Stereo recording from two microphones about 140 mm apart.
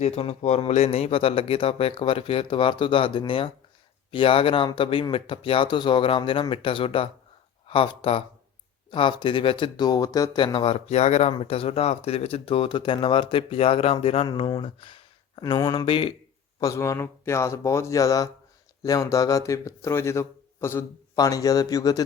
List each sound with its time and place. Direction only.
0.0 s a man's voice: 50° left (ahead or behind)
16.6 s speech: 25° left (ahead or behind)